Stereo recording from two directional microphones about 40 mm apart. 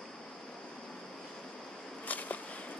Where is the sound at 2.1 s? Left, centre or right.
Left.